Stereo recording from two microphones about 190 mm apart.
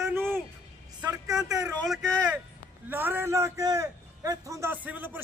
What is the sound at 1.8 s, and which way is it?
Speech, 5° left (ahead or behind).